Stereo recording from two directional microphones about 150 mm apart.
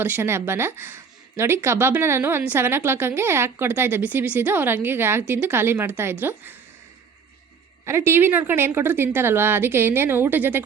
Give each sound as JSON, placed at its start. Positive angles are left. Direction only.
{"t": 0.0, "sound": "a woman's voice", "side_deg": -15}
{"t": 7.9, "sound": "a woman's voice", "side_deg": -15}